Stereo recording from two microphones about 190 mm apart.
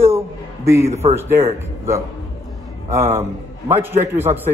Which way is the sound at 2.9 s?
15° right (ahead or behind).